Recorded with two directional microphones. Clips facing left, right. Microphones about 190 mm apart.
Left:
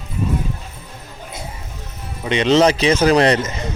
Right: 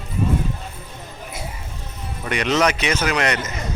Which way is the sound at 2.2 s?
25° left (ahead or behind).